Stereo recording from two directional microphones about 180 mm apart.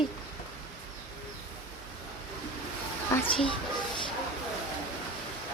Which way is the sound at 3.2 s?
30° left (ahead or behind).